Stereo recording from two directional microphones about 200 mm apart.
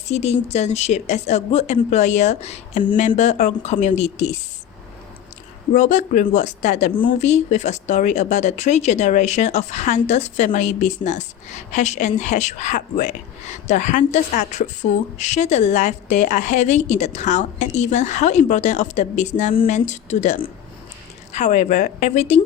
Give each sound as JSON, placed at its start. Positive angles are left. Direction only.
{"t": 0.1, "sound": "speech", "side_deg": 35}
{"t": 5.7, "sound": "speech", "side_deg": 35}